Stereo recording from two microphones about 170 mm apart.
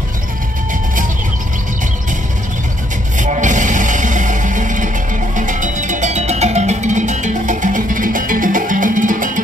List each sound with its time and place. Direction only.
3.2 s music: 45° right (ahead or behind)